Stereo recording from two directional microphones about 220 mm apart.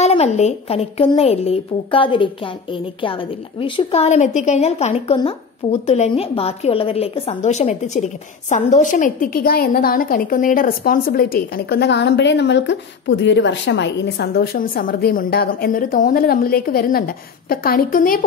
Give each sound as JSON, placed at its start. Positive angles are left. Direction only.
{"t": 0.0, "sound": "a woman's voice", "side_deg": 30}